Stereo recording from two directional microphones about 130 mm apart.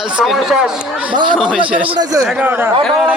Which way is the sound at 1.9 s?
25° right (ahead or behind).